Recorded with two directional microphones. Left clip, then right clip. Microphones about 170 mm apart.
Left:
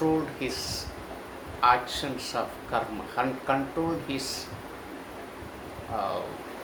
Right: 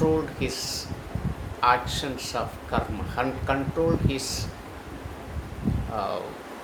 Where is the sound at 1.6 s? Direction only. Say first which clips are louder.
Right 1 dB; 20° right (ahead or behind).